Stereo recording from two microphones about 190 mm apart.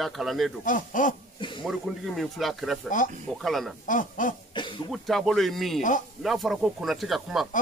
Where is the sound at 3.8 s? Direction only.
45° left (ahead or behind).